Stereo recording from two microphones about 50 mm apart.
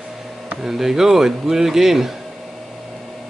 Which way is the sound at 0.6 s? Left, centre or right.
Centre.